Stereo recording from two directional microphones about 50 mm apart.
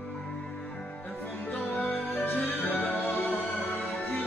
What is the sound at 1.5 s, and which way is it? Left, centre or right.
Music, left.